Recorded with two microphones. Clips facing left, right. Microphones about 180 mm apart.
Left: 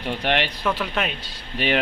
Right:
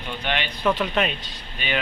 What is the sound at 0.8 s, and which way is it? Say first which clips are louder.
Speech: right 3 dB; centre (ahead or behind).